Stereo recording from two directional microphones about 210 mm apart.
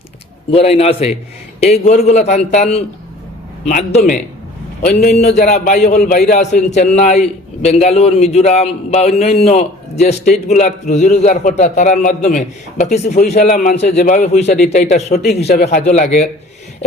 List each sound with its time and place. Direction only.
0.5 s a man's voice: 30° left (ahead or behind)
6.0 s a man's voice: 50° left (ahead or behind)
6.4 s a man's voice: 35° left (ahead or behind)
15.1 s a man's voice: 50° left (ahead or behind)
15.9 s a man's voice: 35° left (ahead or behind)